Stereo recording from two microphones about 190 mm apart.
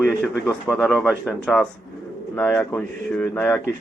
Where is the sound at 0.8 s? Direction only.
Centre (ahead or behind).